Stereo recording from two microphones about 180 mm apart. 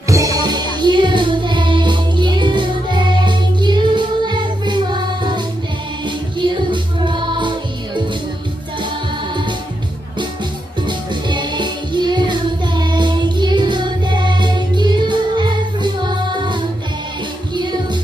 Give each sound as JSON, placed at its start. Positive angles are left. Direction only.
{"t": 0.1, "sound": "music", "side_deg": -20}
{"t": 10.9, "sound": "music", "side_deg": -25}